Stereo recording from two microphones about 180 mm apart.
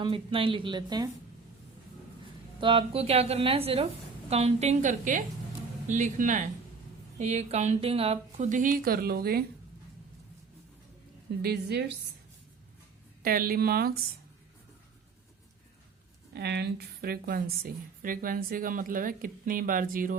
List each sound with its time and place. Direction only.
0.0 s a woman's voice: 30° right (ahead or behind)
2.6 s a woman's voice: 30° right (ahead or behind); by 9.4 s 60° right (ahead or behind)
11.4 s a woman's voice: 65° right (ahead or behind)
13.2 s a woman's voice: 55° right (ahead or behind)
16.3 s a woman's voice: 65° right (ahead or behind); by 20.1 s 50° right (ahead or behind)